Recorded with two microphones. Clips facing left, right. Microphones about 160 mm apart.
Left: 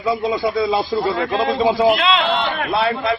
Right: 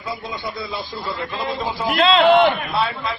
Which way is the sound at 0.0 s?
70° left (ahead or behind).